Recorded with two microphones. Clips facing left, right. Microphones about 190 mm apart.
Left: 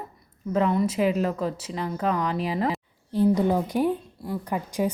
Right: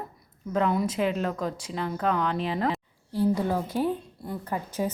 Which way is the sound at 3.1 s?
20° left (ahead or behind).